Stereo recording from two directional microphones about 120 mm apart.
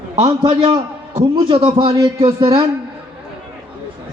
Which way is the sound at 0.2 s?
45° right (ahead or behind).